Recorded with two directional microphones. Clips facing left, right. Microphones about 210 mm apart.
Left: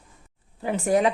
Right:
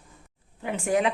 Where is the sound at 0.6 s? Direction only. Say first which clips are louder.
Left 3 dB; 35° left (ahead or behind).